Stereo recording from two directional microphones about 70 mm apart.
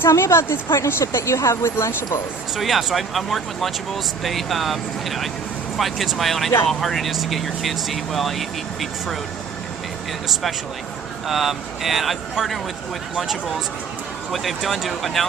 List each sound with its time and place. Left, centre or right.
0.0 s speech: left
2.6 s speech: centre
11.3 s speech: centre